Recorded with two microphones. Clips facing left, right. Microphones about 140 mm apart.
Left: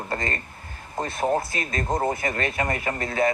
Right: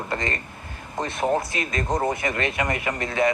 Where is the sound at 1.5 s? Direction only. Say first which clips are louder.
Right 1 dB; 40° left (ahead or behind).